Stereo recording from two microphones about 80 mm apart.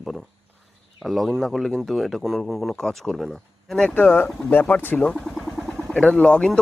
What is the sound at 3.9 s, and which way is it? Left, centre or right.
Speech, left.